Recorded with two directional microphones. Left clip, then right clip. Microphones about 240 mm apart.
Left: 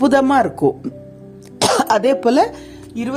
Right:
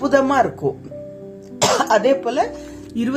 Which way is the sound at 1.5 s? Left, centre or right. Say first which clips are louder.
Left 1 dB; left.